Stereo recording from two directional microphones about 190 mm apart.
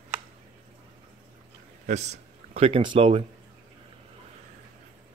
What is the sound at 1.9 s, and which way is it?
Speech, 35° right (ahead or behind).